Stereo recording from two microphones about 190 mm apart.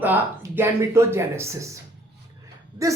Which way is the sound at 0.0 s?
10° right (ahead or behind).